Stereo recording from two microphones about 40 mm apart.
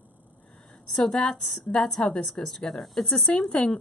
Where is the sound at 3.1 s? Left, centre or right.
Left.